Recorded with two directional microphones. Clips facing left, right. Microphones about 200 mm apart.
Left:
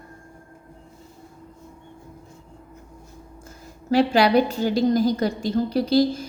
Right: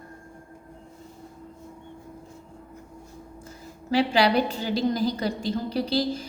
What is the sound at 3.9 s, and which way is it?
A woman's voice, 45° left (ahead or behind).